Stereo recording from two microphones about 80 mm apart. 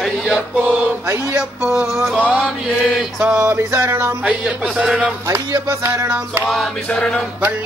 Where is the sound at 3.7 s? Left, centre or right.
Right.